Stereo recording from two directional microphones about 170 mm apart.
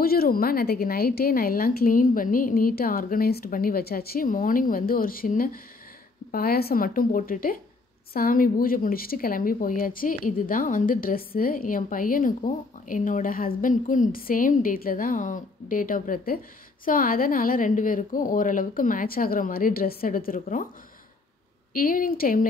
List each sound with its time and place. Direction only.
0.0 s a woman's voice: 60° left (ahead or behind)
21.7 s a woman's voice: 55° left (ahead or behind)